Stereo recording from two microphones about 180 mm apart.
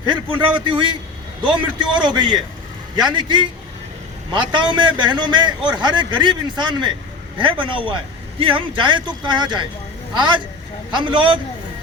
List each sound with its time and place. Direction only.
0.0 s speech: 25° right (ahead or behind)